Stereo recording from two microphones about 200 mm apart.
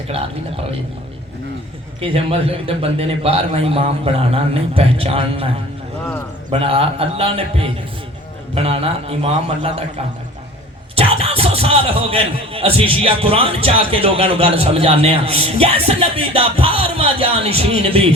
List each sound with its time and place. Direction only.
0.1 s speech: 30° right (ahead or behind)
2.0 s speech: 30° right (ahead or behind)
6.5 s speech: 30° right (ahead or behind)
10.9 s speech: 30° right (ahead or behind)